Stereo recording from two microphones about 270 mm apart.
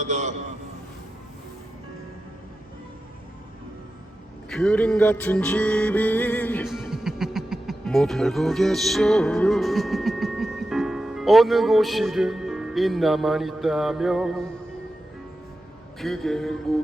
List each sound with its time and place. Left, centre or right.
0.0 s a sound: right
4.4 s music: centre
16.0 s a man's voice: centre